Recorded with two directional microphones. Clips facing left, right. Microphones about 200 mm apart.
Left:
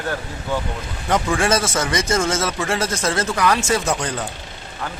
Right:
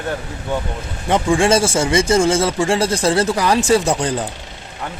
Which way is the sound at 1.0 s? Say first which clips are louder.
Right 4 dB; 25° right (ahead or behind).